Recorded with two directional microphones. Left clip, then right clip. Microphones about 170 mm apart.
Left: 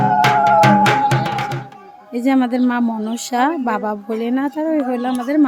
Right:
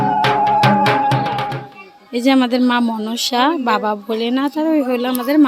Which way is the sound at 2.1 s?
5° left (ahead or behind).